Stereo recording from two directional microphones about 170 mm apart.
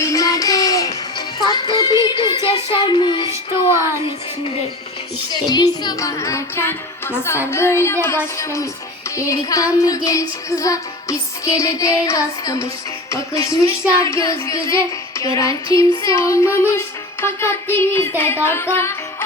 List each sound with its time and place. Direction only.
0.0 s child singing: 20° left (ahead or behind)
1.4 s music: 25° left (ahead or behind)
4.0 s speech: 35° left (ahead or behind)
5.3 s music: 25° left (ahead or behind)